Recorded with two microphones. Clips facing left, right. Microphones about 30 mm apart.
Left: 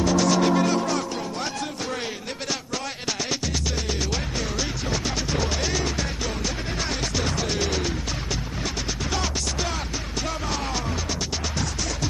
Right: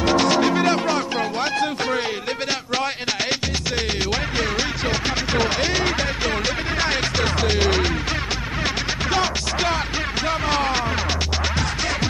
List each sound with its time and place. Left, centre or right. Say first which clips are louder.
0.0 s music: right 3 dB; right
4.1 s music: right 6 dB; right
4.8 s music: right 5 dB; right
5.6 s speech: right 5 dB; right
5.9 s music: right 6 dB; right
9.1 s music: right 6 dB; right